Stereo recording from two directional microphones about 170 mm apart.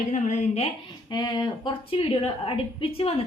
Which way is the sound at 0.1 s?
45° left (ahead or behind).